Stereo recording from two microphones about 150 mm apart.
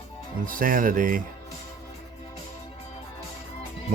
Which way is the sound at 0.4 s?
65° right (ahead or behind).